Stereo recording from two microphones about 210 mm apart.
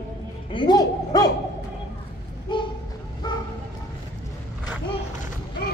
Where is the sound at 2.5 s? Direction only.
25° left (ahead or behind).